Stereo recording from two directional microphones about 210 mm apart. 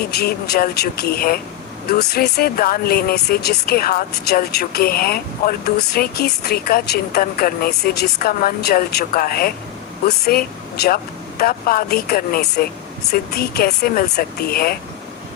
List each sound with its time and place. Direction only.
0.1 s speech: 50° left (ahead or behind)